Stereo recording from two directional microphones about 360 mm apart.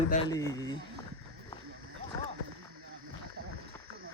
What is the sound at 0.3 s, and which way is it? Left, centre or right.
Speech, centre.